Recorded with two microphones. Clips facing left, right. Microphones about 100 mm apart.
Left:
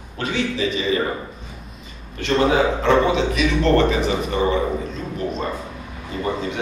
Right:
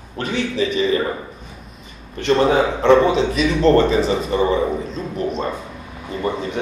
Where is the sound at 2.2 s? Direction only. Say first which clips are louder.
Right 2 dB; 30° right (ahead or behind).